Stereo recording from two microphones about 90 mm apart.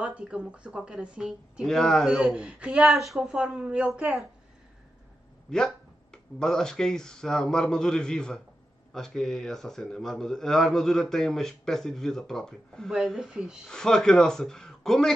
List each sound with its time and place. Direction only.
0.0 s a woman's voice: 10° right (ahead or behind)
1.7 s a man's voice: 5° left (ahead or behind)
2.0 s a woman's voice: 10° right (ahead or behind)
5.5 s a man's voice: 5° left (ahead or behind); by 13.7 s 10° right (ahead or behind)
13.7 s speech: 5° left (ahead or behind)